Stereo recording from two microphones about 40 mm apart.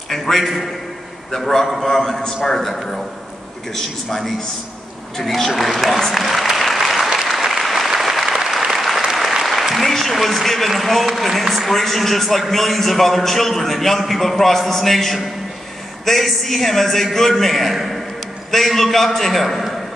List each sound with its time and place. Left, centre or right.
0.1 s a man's voice: centre
5.1 s speech: centre
6.1 s applause: centre
8.3 s applause: centre
8.7 s applause: centre
9.4 s a man's voice: centre